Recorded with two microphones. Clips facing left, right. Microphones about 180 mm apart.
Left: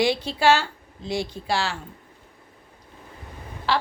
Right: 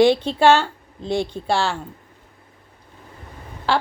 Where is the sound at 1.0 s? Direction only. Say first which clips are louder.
Right 5 dB; 30° right (ahead or behind).